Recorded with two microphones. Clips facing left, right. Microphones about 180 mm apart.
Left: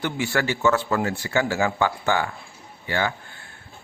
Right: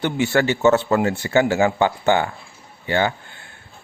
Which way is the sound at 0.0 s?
25° right (ahead or behind).